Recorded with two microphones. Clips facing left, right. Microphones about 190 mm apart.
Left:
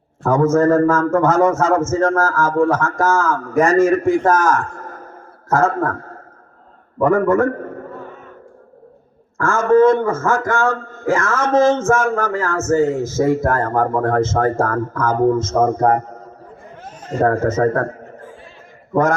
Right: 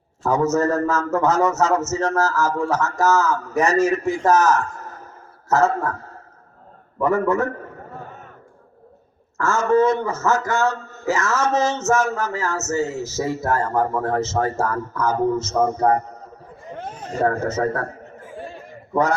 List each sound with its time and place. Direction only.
0.2 s a man's voice: 50° left (ahead or behind)
9.4 s a man's voice: 50° left (ahead or behind)